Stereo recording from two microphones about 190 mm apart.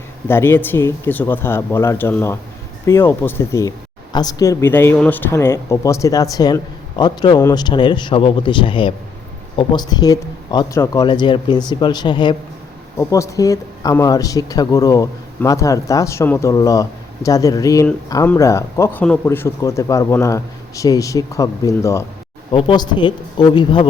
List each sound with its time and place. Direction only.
0.3 s speech: 10° left (ahead or behind)